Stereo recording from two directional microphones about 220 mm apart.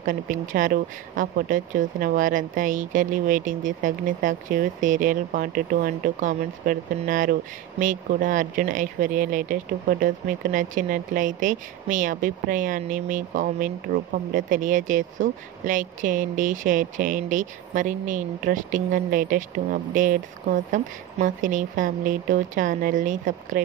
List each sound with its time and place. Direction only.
0.0 s speech: 40° right (ahead or behind)